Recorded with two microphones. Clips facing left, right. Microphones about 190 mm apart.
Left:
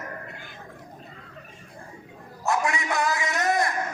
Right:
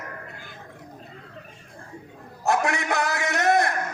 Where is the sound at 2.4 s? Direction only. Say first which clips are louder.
Right 2 dB; 65° right (ahead or behind).